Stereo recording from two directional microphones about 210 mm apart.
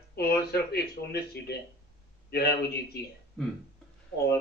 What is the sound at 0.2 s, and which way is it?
A man's voice, 50° left (ahead or behind).